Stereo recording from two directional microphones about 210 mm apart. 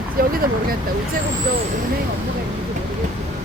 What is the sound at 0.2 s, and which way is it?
Speech, 45° right (ahead or behind).